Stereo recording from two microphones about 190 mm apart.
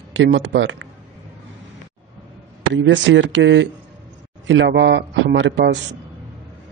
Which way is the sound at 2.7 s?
80° right.